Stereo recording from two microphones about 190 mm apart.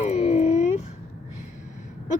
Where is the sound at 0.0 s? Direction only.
35° left (ahead or behind).